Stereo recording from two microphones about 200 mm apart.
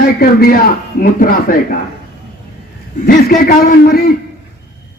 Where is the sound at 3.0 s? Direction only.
50° left (ahead or behind).